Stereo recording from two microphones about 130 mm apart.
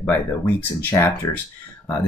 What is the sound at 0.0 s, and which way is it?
Speech, 15° left (ahead or behind).